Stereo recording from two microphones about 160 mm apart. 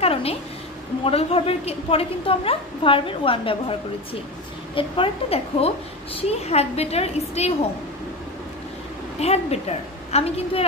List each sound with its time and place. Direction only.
0.0 s a woman's voice: 40° left (ahead or behind)
9.2 s a woman's voice: 40° left (ahead or behind)